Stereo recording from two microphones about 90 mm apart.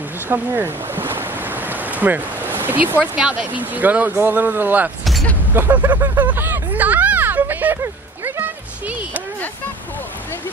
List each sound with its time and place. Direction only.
0.3 s ocean: 25° right (ahead or behind)
3.2 s speech: 10° right (ahead or behind)
6.2 s a sound: 25° right (ahead or behind)